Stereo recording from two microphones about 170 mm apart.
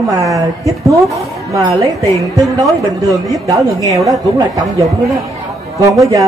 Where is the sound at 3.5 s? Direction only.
20° right (ahead or behind).